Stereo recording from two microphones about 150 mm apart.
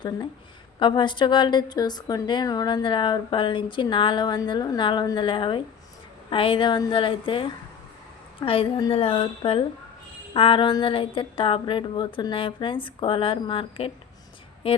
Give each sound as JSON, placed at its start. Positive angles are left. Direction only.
{"t": 0.8, "sound": "a woman's voice", "side_deg": 30}